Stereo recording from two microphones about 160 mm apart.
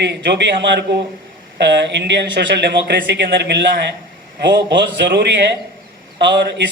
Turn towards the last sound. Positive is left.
turn(degrees=-90)